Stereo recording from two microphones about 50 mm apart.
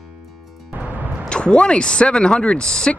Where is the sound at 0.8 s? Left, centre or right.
Right.